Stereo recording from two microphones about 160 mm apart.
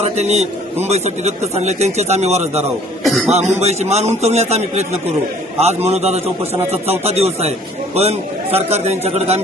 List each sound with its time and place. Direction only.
0.0 s a man's voice: 45° right (ahead or behind)
3.0 s a man's voice: centre (ahead or behind)
3.3 s a man's voice: 45° right (ahead or behind)